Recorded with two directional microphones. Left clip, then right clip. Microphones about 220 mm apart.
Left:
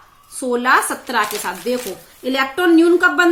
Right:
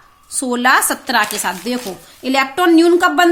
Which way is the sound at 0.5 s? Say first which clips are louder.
Right 2 dB; 50° right (ahead or behind).